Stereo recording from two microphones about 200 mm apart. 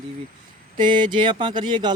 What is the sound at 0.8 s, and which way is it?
Speech, 25° right (ahead or behind).